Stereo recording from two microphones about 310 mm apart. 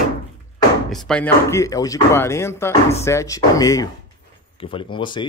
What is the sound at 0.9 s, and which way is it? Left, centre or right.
Speech, centre.